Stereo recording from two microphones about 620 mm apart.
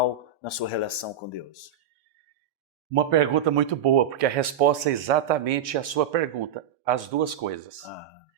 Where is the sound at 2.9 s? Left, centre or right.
Right.